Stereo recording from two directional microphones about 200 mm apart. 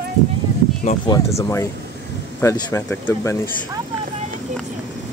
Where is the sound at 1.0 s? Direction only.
15° left (ahead or behind).